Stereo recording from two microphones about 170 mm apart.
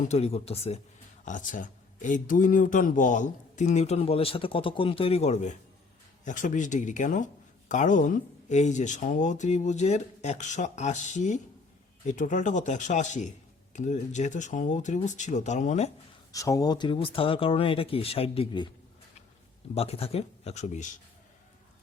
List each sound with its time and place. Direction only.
0.1 s speech: 40° left (ahead or behind)
1.2 s speech: 50° left (ahead or behind)
16.3 s speech: 20° left (ahead or behind)
19.7 s speech: 35° left (ahead or behind)